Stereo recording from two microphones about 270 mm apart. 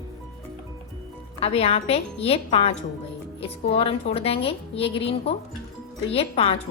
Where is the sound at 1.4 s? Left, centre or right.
Left.